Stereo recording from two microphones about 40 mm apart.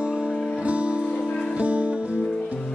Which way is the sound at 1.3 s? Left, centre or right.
Centre.